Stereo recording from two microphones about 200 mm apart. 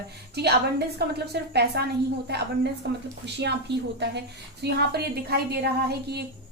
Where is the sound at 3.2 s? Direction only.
60° right (ahead or behind).